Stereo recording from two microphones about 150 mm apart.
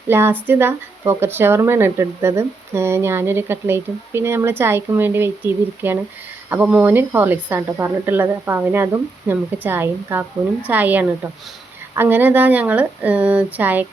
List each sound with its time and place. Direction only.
0.1 s speech: 15° right (ahead or behind)